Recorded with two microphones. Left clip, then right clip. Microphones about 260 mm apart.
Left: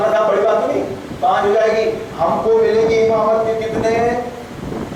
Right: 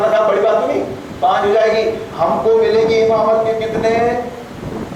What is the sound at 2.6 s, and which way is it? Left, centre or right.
Speech, centre.